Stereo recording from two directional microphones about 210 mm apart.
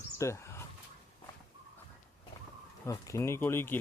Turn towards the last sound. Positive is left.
turn(degrees=10)  # may be behind; listen again after turning